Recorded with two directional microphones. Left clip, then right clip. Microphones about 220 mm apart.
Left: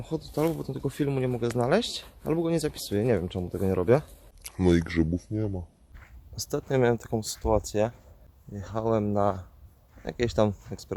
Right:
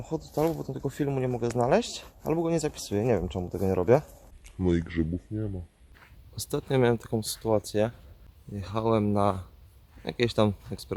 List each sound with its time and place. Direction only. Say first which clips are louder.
0.0 s speech: even; 5° left (ahead or behind)
4.4 s speech: left 4 dB; 50° left (ahead or behind)
6.0 s speech: left 2 dB; centre (ahead or behind)
8.5 s speech: right 1 dB; 10° right (ahead or behind)